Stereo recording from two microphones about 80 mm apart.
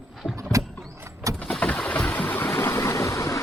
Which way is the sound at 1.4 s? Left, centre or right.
Centre.